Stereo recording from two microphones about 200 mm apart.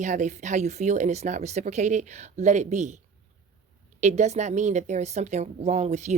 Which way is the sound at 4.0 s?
35° right (ahead or behind).